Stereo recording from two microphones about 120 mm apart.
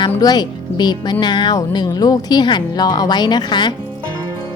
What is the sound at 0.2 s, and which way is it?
A woman's voice, 35° left (ahead or behind).